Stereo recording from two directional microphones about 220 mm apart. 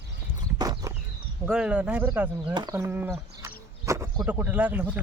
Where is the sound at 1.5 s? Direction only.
5° right (ahead or behind).